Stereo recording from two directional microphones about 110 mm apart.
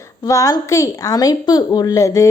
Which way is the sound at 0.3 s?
30° left (ahead or behind).